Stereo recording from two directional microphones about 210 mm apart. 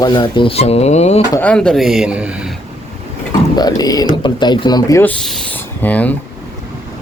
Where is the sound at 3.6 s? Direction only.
20° left (ahead or behind).